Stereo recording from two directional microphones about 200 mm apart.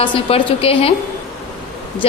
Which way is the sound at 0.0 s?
25° left (ahead or behind).